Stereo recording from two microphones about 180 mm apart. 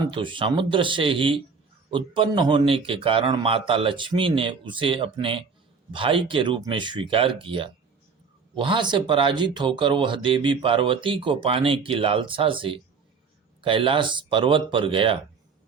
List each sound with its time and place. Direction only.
0.1 s speech: 30° right (ahead or behind)